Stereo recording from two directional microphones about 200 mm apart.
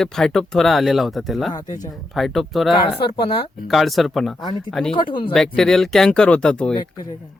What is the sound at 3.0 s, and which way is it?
Speech, 25° left (ahead or behind).